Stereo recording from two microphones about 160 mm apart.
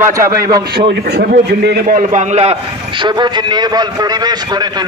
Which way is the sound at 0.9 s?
80° right.